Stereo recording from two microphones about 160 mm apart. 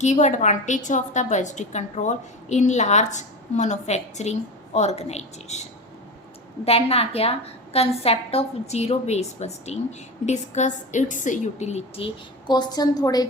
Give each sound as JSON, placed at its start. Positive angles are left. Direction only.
{"t": 0.0, "sound": "a woman's voice", "side_deg": 50}
{"t": 6.7, "sound": "a woman's voice", "side_deg": 40}